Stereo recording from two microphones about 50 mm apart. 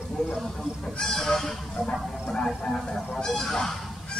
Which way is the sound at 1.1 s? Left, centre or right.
Centre.